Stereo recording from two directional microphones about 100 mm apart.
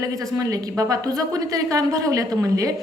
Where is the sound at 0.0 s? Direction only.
35° right (ahead or behind).